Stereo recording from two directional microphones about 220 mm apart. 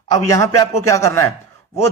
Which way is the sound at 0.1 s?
15° left (ahead or behind).